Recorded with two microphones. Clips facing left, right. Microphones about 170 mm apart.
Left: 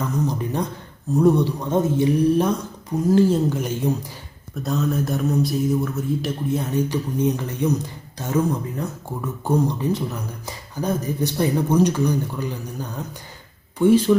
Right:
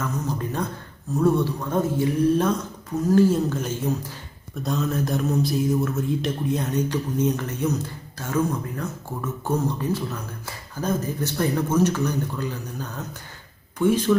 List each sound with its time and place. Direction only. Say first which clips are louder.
0.0 s speech: left 4 dB; 15° left (ahead or behind)
4.6 s speech: left 2 dB; centre (ahead or behind)